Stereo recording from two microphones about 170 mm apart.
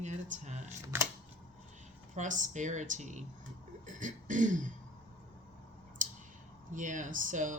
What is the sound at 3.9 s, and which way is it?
Throat clearing, 50° right (ahead or behind).